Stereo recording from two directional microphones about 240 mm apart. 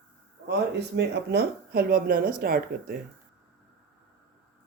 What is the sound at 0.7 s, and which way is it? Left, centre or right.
Speech, right.